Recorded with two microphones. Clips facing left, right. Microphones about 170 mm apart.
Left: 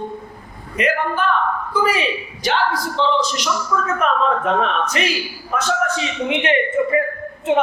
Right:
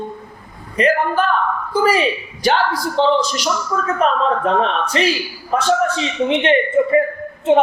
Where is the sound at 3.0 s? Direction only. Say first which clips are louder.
Right 5 dB; 45° right (ahead or behind).